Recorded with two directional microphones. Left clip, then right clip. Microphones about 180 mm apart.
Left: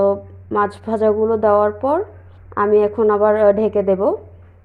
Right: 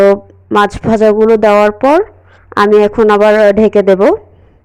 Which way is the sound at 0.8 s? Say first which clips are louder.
Right 9 dB; 40° right (ahead or behind).